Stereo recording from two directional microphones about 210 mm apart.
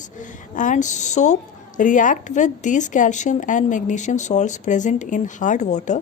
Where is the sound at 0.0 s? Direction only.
35° left (ahead or behind).